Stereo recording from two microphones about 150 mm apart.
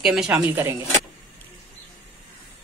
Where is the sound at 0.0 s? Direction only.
5° right (ahead or behind).